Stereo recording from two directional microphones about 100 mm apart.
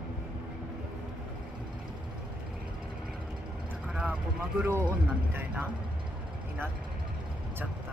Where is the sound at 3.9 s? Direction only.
10° right (ahead or behind).